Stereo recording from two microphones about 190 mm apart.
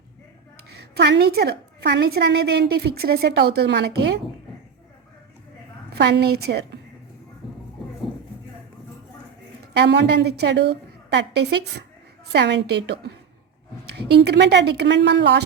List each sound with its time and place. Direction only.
0.7 s a woman's voice: 60° right (ahead or behind)
6.0 s a woman's voice: 60° right (ahead or behind)
7.4 s music: centre (ahead or behind)
9.7 s a woman's voice: 65° right (ahead or behind)